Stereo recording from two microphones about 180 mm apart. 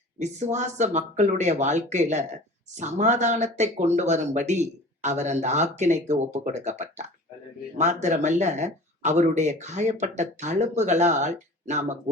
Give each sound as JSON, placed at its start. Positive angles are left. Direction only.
{"t": 0.2, "sound": "speech", "side_deg": -40}